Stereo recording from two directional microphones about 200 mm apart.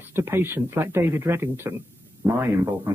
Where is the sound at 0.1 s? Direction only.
10° right (ahead or behind).